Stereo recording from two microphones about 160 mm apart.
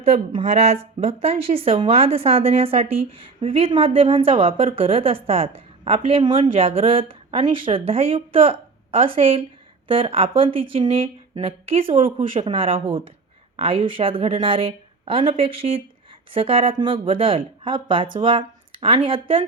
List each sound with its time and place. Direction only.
0.0 s a woman's voice: 45° right (ahead or behind)